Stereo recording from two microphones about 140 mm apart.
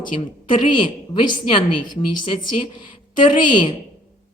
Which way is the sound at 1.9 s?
40° left (ahead or behind).